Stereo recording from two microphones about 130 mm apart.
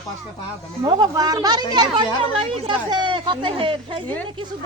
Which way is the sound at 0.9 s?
30° right (ahead or behind).